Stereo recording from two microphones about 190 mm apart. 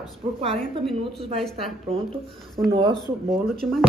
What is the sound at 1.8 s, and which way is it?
Speech, 30° right (ahead or behind).